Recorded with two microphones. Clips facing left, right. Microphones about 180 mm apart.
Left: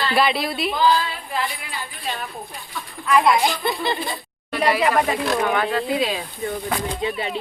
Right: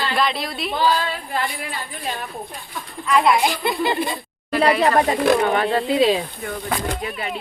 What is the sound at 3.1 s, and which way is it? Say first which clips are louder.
Speech: even; centre (ahead or behind).